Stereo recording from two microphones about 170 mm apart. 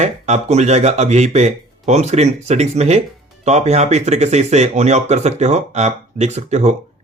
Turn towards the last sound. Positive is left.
turn(degrees=-40)  # may be behind; listen again after turning